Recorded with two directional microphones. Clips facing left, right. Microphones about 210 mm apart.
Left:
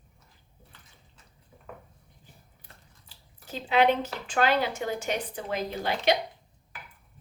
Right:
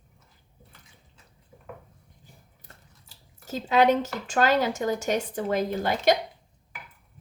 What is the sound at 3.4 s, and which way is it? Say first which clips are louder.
Speech: right 2 dB; 40° right (ahead or behind).